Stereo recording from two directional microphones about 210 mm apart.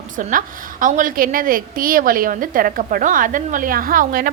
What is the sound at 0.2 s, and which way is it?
A woman's voice, 40° right (ahead or behind).